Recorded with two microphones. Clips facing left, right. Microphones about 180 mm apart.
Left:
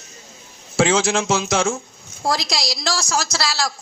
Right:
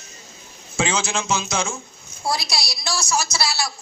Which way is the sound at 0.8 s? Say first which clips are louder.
Left 6 dB; 85° left.